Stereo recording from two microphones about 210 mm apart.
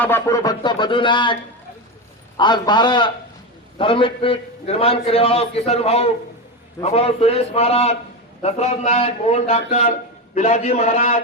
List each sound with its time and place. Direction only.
0.0 s a man's voice: 15° left (ahead or behind)
2.4 s a man's voice: 20° left (ahead or behind)